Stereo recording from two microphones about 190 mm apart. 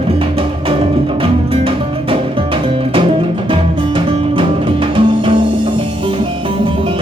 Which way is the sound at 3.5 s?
25° right (ahead or behind).